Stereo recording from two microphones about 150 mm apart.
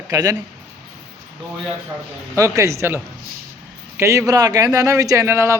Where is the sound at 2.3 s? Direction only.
20° right (ahead or behind).